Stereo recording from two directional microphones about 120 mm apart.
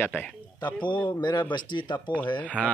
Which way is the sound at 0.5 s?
40° left (ahead or behind).